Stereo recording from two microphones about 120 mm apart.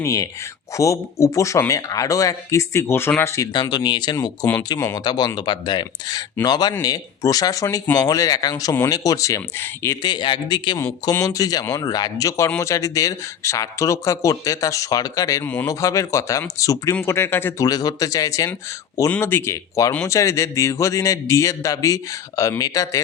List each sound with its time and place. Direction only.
0.0 s a man's voice: 25° left (ahead or behind)
3.5 s speech: 35° left (ahead or behind)
4.8 s a man's voice: 25° left (ahead or behind)
5.0 s a man's voice: 35° left (ahead or behind)
10.0 s speech: 40° left (ahead or behind)
11.1 s a man's voice: 25° left (ahead or behind)
17.7 s a man's voice: 35° left (ahead or behind)